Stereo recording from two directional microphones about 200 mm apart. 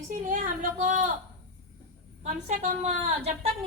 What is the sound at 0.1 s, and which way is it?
A woman's voice, 40° right (ahead or behind).